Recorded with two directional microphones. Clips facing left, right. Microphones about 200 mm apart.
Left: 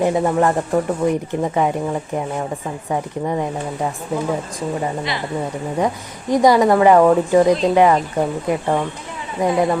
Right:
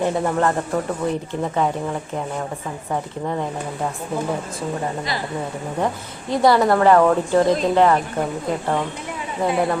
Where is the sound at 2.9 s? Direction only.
10° left (ahead or behind).